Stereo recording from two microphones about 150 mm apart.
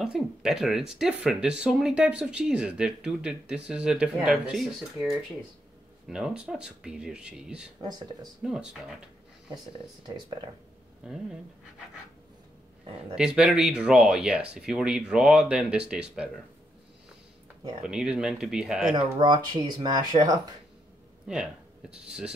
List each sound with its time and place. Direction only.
0.0 s speech: 5° right (ahead or behind)
9.5 s speech: 30° right (ahead or behind)
11.0 s speech: 5° right (ahead or behind)
13.1 s speech: 5° right (ahead or behind)
17.8 s speech: 5° right (ahead or behind)
18.9 s speech: 30° right (ahead or behind)
21.3 s speech: 5° right (ahead or behind)